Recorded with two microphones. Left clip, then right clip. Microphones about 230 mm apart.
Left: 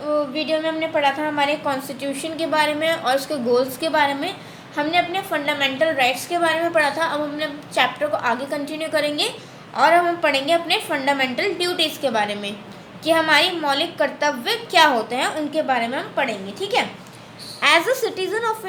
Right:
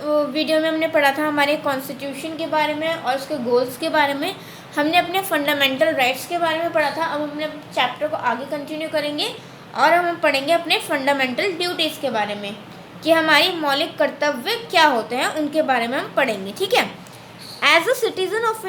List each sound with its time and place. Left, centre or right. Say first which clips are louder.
0.1 s a woman's voice: right 2 dB; right
2.0 s a woman's voice: left 2 dB; centre
3.8 s a woman's voice: even; centre; by 5.9 s right
6.3 s a woman's voice: left 1 dB; centre
9.7 s a woman's voice: left 1 dB; centre
13.1 s a woman's voice: right 1 dB; centre; by 16.8 s right
17.6 s a woman's voice: right 1 dB; centre